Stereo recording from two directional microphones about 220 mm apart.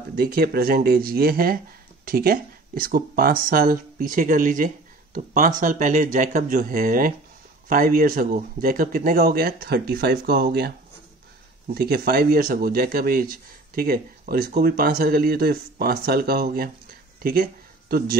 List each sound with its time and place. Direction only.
0.1 s speech: 45° right (ahead or behind)
11.7 s speech: 45° right (ahead or behind)
17.2 s a sound: 40° right (ahead or behind)